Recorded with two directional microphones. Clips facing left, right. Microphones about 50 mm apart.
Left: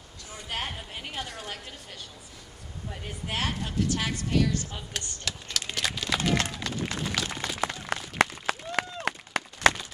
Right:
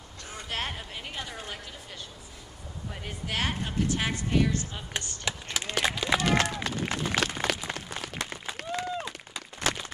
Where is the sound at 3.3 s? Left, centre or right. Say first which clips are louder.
Even; right.